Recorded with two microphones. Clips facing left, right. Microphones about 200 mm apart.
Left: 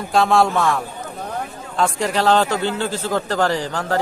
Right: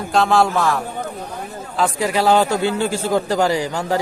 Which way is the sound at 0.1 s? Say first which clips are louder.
Even; centre (ahead or behind).